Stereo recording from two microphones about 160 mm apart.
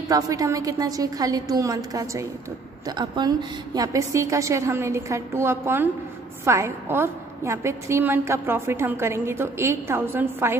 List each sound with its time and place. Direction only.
0.1 s a woman's voice: 20° right (ahead or behind)